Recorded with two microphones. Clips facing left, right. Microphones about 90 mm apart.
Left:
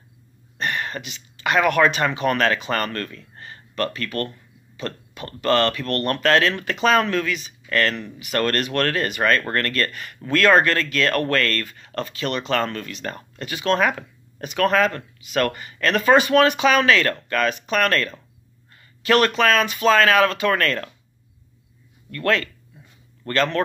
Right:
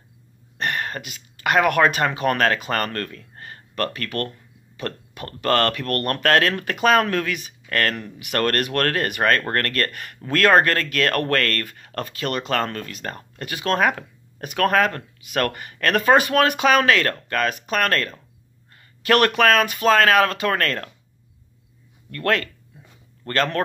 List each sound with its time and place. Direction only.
0.6 s speech: 55° right (ahead or behind)
18.7 s speech: 55° right (ahead or behind); by 20.9 s 40° right (ahead or behind)
22.1 s speech: 45° right (ahead or behind)